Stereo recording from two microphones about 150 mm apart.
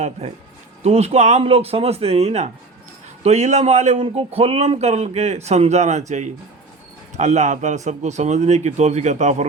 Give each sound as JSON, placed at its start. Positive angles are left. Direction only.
{"t": 0.2, "sound": "speech", "side_deg": -45}